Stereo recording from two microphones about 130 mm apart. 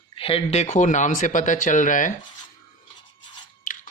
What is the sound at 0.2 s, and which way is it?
Speech, 45° left (ahead or behind).